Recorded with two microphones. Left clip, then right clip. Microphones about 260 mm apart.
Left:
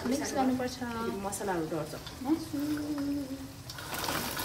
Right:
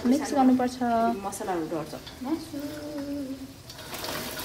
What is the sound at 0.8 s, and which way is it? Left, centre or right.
Speech, right.